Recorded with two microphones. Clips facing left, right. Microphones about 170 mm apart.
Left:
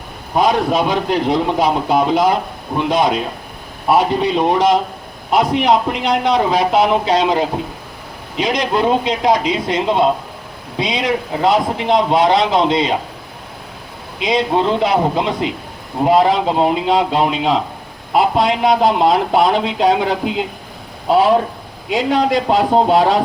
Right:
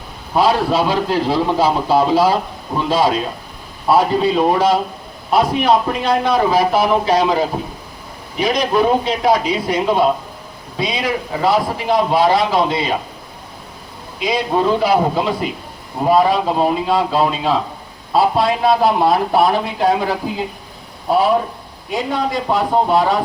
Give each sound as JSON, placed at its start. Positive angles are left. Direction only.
{"t": 0.3, "sound": "speech", "side_deg": 20}
{"t": 14.2, "sound": "speech", "side_deg": 20}
{"t": 21.8, "sound": "a man's voice", "side_deg": 90}